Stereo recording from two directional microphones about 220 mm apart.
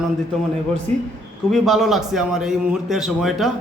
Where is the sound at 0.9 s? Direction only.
30° right (ahead or behind).